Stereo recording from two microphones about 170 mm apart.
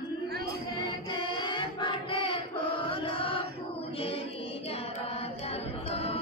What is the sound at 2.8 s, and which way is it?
Chant, 30° left (ahead or behind).